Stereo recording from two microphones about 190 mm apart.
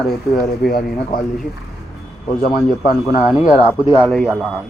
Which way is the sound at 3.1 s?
5° right (ahead or behind).